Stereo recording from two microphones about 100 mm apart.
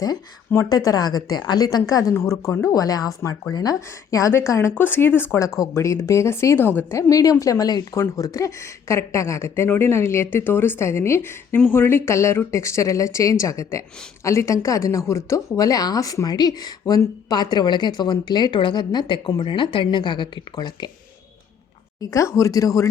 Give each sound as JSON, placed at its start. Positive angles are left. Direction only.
{"t": 0.7, "sound": "a woman's voice", "side_deg": 40}
{"t": 22.0, "sound": "a woman's voice", "side_deg": 30}